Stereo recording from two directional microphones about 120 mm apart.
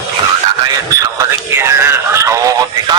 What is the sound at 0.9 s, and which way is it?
Radio, 30° right (ahead or behind).